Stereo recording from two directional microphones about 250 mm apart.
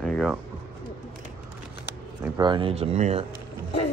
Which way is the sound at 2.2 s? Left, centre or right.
Centre.